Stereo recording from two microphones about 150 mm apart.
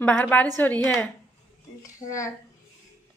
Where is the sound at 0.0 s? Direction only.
10° left (ahead or behind).